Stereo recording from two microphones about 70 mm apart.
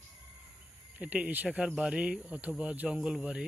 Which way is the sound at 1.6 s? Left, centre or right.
Centre.